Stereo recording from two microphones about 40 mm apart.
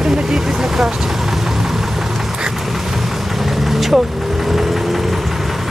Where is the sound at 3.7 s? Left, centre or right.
Centre.